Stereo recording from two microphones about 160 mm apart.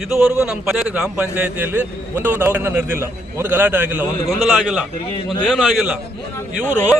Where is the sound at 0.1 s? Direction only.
15° right (ahead or behind).